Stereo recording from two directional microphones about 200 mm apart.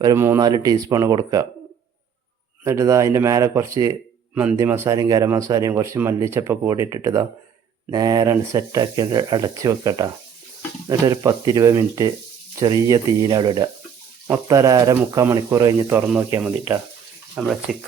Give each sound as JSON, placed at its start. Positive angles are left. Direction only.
{"t": 0.0, "sound": "speech", "side_deg": -15}
{"t": 2.6, "sound": "speech", "side_deg": -15}